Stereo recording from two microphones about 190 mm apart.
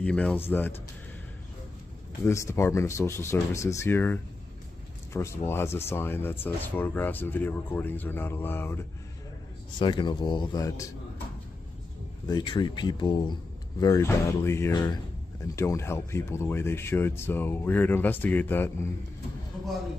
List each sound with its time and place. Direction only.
0.0 s speech: 5° left (ahead or behind)
2.2 s speech: 15° left (ahead or behind)
9.8 s speech: 25° left (ahead or behind)
12.3 s speech: 20° left (ahead or behind)